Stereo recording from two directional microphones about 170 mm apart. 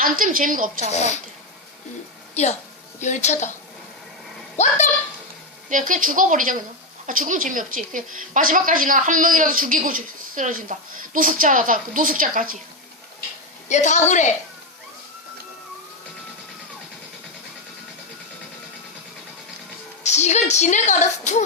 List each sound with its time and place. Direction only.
0.0 s speech: 55° right (ahead or behind)
0.9 s a woman's voice: 45° left (ahead or behind)
2.3 s a woman's voice: 40° left (ahead or behind)
4.5 s a woman's voice: 45° left (ahead or behind)
5.6 s speech: 50° right (ahead or behind)
13.7 s a woman's voice: 45° left (ahead or behind)
20.1 s a woman's voice: 40° left (ahead or behind)